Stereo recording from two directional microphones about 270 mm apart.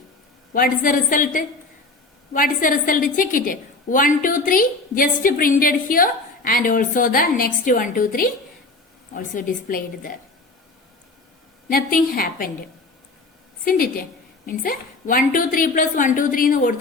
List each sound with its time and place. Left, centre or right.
0.5 s a woman's voice: left
11.7 s a woman's voice: left
13.7 s a woman's voice: left